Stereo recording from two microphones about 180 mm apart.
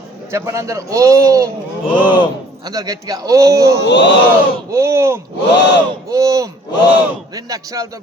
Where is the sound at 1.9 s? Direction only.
25° left (ahead or behind).